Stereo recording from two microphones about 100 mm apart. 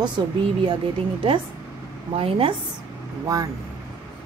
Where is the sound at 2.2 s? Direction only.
65° right (ahead or behind).